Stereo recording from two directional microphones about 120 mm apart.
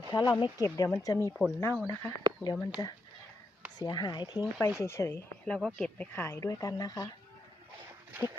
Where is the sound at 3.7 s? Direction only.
35° left (ahead or behind).